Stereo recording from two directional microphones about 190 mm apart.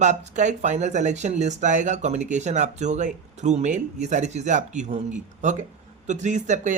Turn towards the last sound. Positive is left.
turn(degrees=-40)  # may be behind; listen again after turning